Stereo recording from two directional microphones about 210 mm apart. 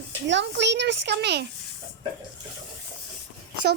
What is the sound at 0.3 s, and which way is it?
A child's voice, 55° right (ahead or behind).